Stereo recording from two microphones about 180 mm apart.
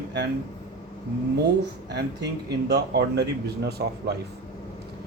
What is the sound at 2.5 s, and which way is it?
Speech, 65° right (ahead or behind).